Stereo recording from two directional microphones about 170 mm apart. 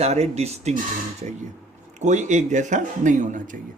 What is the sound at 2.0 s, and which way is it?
Speech, 45° right (ahead or behind).